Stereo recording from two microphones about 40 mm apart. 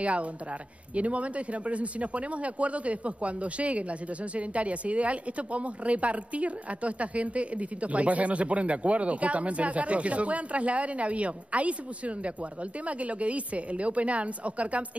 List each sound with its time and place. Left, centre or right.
0.0 s speech: right